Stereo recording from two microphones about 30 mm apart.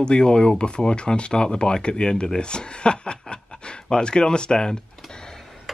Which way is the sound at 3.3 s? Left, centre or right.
Left.